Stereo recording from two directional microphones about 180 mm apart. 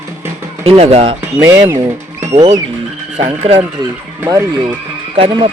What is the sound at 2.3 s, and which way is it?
Speech, 35° right (ahead or behind).